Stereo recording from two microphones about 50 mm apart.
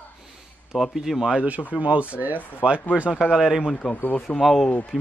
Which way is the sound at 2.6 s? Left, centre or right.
Centre.